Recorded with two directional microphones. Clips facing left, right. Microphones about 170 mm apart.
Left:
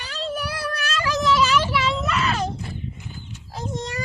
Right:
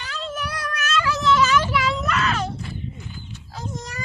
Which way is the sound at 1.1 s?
15° left (ahead or behind).